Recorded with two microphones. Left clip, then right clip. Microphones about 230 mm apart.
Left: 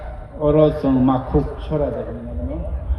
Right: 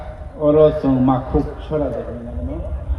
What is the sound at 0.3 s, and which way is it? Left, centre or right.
Speech, left.